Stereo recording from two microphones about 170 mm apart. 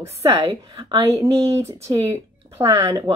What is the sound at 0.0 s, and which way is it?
A woman's voice, 15° right (ahead or behind).